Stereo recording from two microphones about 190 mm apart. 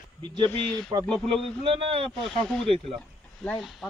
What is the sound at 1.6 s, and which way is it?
Speech, 30° right (ahead or behind).